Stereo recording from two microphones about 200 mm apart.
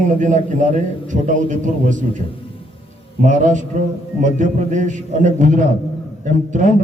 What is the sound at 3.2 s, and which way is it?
Mantra, 40° right (ahead or behind).